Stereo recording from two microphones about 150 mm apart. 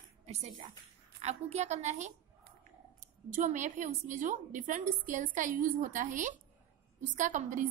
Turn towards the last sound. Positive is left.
turn(degrees=-55)  # may be behind; listen again after turning